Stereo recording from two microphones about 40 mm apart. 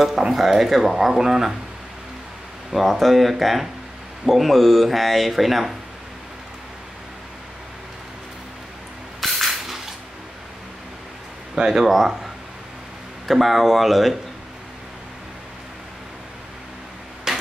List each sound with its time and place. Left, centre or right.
0.0 s speech: centre
2.7 s speech: centre
9.2 s a sound: centre
11.5 s speech: centre
11.8 s speech: centre
13.3 s speech: centre
17.3 s a sound: centre